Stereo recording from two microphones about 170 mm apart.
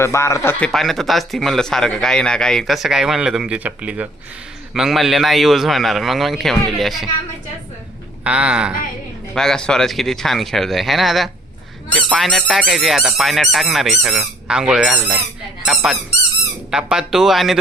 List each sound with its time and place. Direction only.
0.0 s speech: 15° left (ahead or behind)
0.6 s a man's voice: centre (ahead or behind)
8.2 s a man's voice: 5° right (ahead or behind)